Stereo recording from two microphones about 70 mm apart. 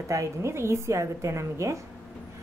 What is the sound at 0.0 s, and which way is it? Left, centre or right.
A woman's voice, right.